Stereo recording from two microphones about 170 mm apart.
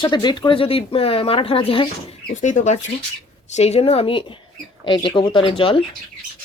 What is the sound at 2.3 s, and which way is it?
Speech, 45° left (ahead or behind).